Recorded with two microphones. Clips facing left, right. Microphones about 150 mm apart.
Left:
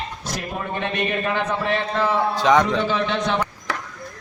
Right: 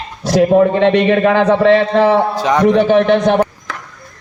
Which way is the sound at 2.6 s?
60° right (ahead or behind).